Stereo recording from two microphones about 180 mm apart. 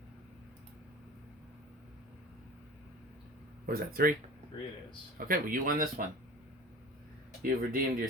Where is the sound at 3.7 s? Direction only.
55° right (ahead or behind).